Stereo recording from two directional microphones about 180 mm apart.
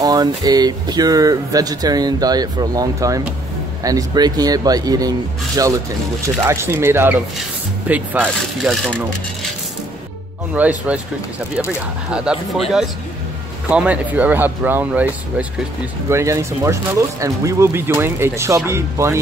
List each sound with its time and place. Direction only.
0.0 s speech: 20° right (ahead or behind)
10.5 s speech: 10° right (ahead or behind)
12.1 s speech: centre (ahead or behind)